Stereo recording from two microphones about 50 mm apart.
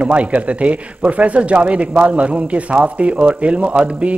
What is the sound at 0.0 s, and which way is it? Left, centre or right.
A man's voice, right.